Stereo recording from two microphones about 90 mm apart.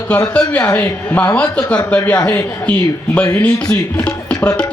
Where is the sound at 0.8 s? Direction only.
25° left (ahead or behind).